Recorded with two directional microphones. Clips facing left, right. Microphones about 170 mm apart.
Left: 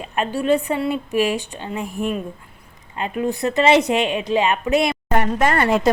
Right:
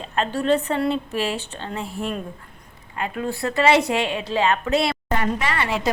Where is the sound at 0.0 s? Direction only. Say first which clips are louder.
Left 1 dB; 10° left (ahead or behind).